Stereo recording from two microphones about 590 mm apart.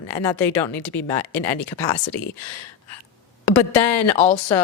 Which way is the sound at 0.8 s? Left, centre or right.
Left.